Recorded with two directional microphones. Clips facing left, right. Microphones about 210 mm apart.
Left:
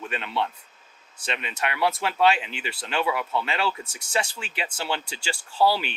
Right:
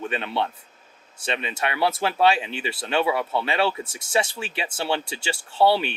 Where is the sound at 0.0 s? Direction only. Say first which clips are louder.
Right 2 dB; 30° right (ahead or behind).